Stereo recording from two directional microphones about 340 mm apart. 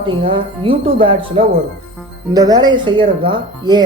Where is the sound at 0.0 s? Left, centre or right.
Centre.